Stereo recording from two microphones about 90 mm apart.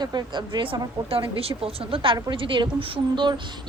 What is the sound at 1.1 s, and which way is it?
A woman's voice, 90° right.